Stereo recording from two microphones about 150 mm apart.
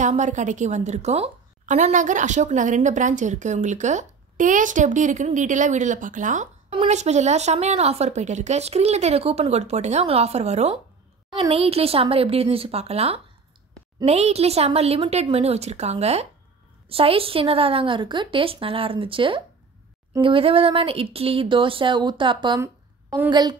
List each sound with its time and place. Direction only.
0.0 s a woman's voice: 55° right (ahead or behind); by 22.6 s 30° right (ahead or behind)
22.6 s a sound: 15° right (ahead or behind)
23.3 s a woman's voice: 30° right (ahead or behind)